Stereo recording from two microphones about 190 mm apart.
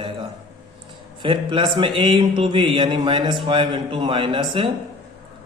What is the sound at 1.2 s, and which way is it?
A man's voice, 25° right (ahead or behind).